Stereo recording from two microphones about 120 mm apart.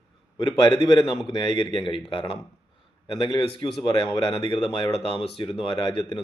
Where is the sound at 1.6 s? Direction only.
45° left (ahead or behind).